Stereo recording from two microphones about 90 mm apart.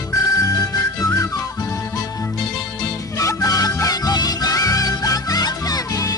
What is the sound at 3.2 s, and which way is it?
Music, 35° left (ahead or behind).